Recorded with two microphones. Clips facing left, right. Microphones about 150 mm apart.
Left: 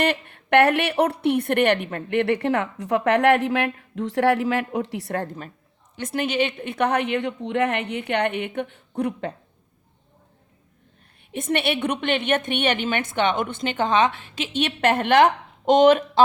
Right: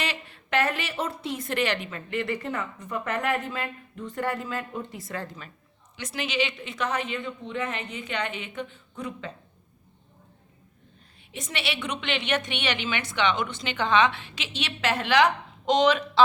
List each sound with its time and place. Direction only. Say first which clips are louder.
0.0 s a woman's voice: left 10 dB; 55° left (ahead or behind)
11.3 s a woman's voice: left 9 dB; 55° left (ahead or behind)